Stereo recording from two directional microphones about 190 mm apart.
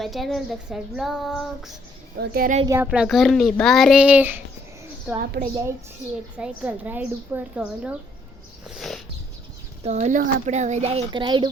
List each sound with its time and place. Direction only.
0.0 s speech: centre (ahead or behind)
2.1 s speech: 55° right (ahead or behind)
2.6 s speech: 10° right (ahead or behind)
5.4 s a woman's voice: 55° right (ahead or behind)
6.3 s a woman's voice: 5° right (ahead or behind)
8.7 s a sound: centre (ahead or behind)
9.8 s speech: 35° right (ahead or behind)